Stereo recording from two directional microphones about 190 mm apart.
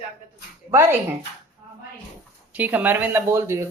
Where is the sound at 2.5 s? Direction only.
10° right (ahead or behind).